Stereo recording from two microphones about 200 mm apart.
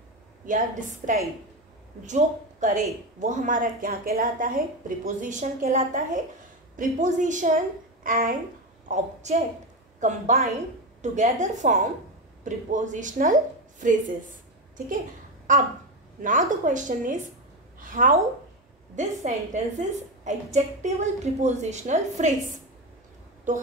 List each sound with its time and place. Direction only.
0.5 s a woman's voice: 40° right (ahead or behind)
15.5 s a woman's voice: 40° right (ahead or behind)